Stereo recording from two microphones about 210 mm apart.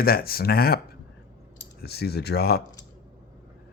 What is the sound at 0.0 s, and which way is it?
Speech, 45° left (ahead or behind).